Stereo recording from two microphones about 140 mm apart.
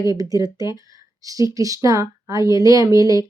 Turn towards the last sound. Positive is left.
turn(degrees=-25)  # may be behind; listen again after turning